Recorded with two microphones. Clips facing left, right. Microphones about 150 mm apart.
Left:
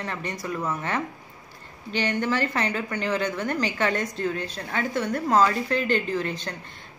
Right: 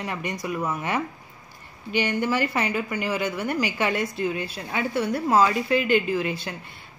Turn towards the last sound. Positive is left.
turn(degrees=-10)  # may be behind; listen again after turning